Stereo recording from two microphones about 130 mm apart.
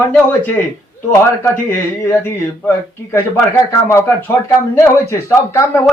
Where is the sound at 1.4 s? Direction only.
20° left (ahead or behind).